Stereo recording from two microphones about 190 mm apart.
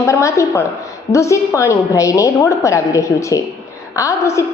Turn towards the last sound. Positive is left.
turn(degrees=15)  # may be behind; listen again after turning